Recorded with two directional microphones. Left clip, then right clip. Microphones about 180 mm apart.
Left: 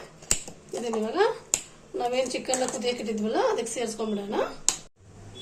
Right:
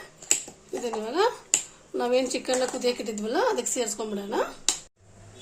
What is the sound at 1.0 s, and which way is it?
A child's voice, 50° right (ahead or behind).